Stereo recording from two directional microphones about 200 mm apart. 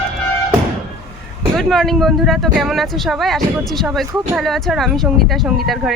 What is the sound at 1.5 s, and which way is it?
Speech, centre (ahead or behind).